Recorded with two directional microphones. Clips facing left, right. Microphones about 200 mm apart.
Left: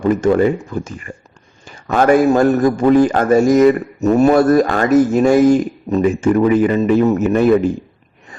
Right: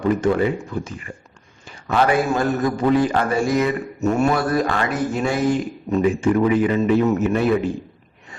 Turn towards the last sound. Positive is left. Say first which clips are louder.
# left 6 dB
turn(degrees=45)  # may be behind; listen again after turning